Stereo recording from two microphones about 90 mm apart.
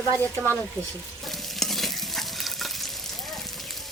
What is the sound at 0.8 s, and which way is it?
Speech, 30° right (ahead or behind).